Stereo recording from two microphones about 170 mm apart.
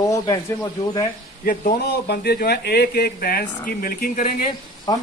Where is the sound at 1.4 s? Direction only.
55° left (ahead or behind).